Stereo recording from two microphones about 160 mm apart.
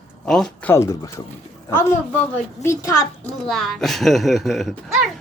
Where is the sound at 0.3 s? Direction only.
5° left (ahead or behind).